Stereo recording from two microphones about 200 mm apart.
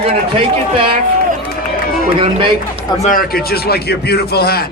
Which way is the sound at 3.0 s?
45° left (ahead or behind).